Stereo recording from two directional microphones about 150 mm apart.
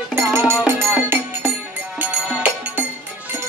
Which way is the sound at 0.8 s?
15° right (ahead or behind).